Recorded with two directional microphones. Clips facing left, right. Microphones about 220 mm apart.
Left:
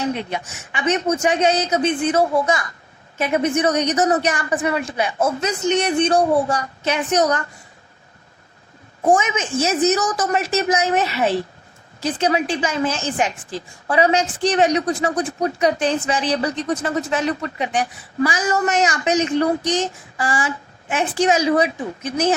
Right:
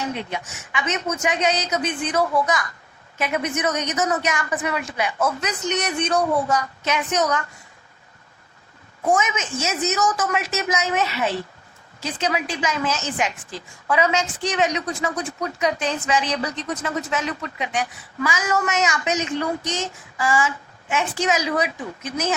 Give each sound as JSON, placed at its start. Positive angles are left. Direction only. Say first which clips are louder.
{"t": 0.3, "sound": "a woman's voice", "louder": "left 3 dB", "side_deg": 35}
{"t": 9.0, "sound": "a woman's voice", "louder": "left 4 dB", "side_deg": 30}